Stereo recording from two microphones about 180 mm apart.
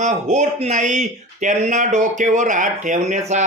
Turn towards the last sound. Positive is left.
turn(degrees=-40)  # may be behind; listen again after turning